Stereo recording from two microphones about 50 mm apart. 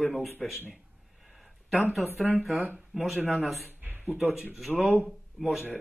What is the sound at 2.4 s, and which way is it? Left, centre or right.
Speech, centre.